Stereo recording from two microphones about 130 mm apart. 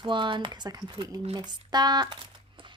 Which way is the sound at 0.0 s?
40° right (ahead or behind).